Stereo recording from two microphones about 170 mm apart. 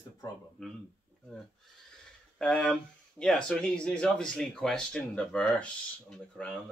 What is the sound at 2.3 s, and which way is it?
Speech, 5° left (ahead or behind).